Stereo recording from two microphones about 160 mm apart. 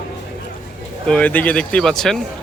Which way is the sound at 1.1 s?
5° left (ahead or behind).